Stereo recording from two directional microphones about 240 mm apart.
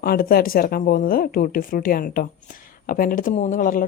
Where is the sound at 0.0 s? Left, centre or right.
Left.